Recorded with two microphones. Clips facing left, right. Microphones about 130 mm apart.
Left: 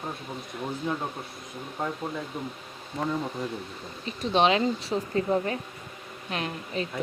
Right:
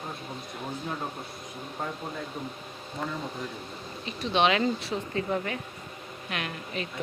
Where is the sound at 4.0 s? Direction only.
35° left (ahead or behind).